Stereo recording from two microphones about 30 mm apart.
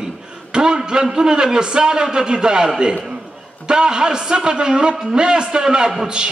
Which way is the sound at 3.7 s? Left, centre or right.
Right.